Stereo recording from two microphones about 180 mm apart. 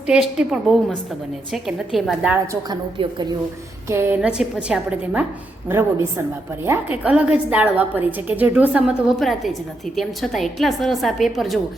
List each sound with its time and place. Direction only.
0.1 s a woman's voice: 5° right (ahead or behind)
2.6 s a woman's voice: 25° right (ahead or behind)
3.8 s a woman's voice: 15° right (ahead or behind)